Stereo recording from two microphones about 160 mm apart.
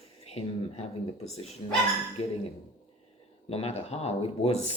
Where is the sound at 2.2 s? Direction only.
40° left (ahead or behind).